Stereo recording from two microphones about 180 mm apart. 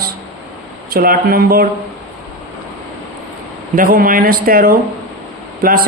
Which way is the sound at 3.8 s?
55° right (ahead or behind).